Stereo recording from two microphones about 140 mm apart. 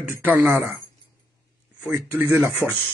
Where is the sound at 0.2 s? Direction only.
10° right (ahead or behind).